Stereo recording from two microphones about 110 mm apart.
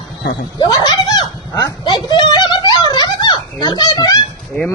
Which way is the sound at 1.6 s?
40° left (ahead or behind).